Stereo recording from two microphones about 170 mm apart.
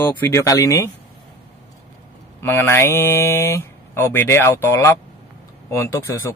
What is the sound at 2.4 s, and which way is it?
Speech, 15° left (ahead or behind).